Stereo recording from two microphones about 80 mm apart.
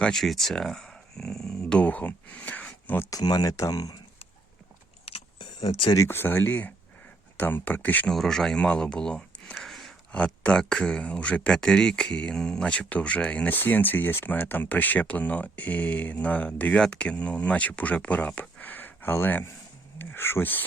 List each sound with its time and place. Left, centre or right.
0.0 s speech: centre; by 3.1 s left
3.1 s speech: left
5.4 s a sound: left
6.1 s speech: left
8.1 s speech: centre
9.6 s a sound: centre
10.1 s speech: centre